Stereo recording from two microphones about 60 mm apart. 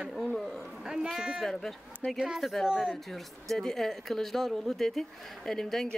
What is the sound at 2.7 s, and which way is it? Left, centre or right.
Speech, centre.